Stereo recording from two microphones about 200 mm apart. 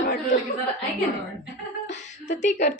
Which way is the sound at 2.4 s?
35° left (ahead or behind).